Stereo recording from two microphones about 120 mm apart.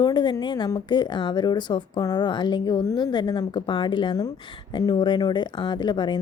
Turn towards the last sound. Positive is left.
turn(degrees=40)  # may be behind; listen again after turning